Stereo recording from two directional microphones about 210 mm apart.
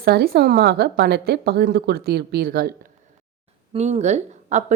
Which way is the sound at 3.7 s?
30° right (ahead or behind).